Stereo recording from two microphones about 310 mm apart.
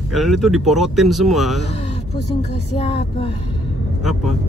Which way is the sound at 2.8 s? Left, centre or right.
Centre.